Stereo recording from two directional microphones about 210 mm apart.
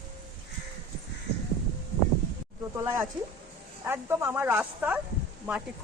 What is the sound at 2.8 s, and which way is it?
Speech, 10° right (ahead or behind).